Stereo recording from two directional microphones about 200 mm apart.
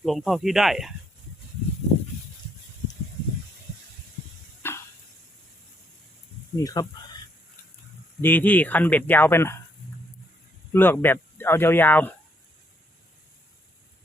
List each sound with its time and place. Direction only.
0.0 s speech: centre (ahead or behind)
4.6 s a sound: 10° left (ahead or behind)
6.6 s speech: 15° left (ahead or behind)
8.2 s speech: 10° left (ahead or behind)
10.7 s speech: 10° left (ahead or behind)